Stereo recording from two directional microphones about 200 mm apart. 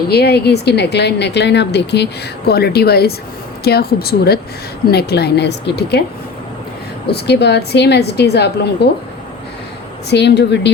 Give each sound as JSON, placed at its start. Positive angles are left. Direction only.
{"t": 0.1, "sound": "a woman's voice", "side_deg": 55}
{"t": 7.1, "sound": "a woman's voice", "side_deg": 60}
{"t": 10.1, "sound": "a woman's voice", "side_deg": 60}